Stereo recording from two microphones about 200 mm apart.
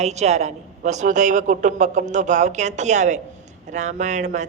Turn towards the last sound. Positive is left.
turn(degrees=-35)  # may be behind; listen again after turning